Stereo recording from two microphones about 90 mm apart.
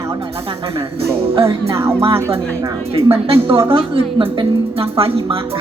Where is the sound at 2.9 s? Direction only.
90° right.